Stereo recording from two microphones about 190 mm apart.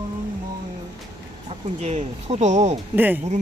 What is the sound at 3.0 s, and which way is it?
Speech, 10° right (ahead or behind).